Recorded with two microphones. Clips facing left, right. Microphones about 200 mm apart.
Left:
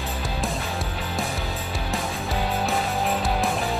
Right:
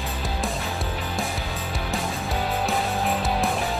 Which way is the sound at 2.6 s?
Centre (ahead or behind).